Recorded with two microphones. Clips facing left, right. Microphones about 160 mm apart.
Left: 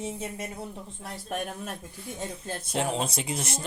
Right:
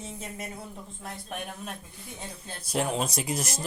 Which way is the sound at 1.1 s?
45° left (ahead or behind).